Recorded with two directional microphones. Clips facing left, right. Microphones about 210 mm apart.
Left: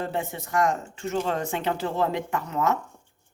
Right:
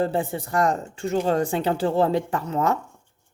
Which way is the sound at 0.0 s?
30° right (ahead or behind).